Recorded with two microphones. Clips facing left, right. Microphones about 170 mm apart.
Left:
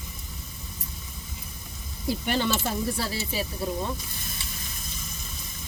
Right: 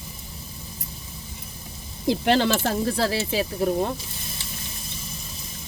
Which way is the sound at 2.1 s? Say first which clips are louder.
Right 6 dB; 90° right.